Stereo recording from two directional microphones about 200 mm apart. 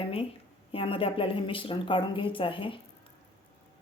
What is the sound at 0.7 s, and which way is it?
Cutlery, 25° left (ahead or behind).